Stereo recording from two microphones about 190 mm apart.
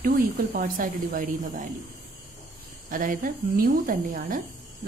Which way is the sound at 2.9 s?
45° right (ahead or behind).